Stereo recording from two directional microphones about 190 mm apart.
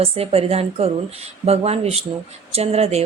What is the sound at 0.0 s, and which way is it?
Speech, 30° right (ahead or behind).